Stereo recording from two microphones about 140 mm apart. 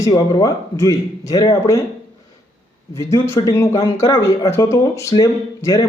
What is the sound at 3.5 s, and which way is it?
A man's voice, 20° left (ahead or behind).